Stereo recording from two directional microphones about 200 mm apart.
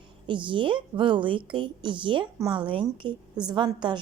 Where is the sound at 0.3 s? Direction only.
25° right (ahead or behind).